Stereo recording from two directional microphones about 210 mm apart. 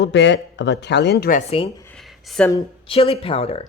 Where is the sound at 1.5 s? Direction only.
30° left (ahead or behind).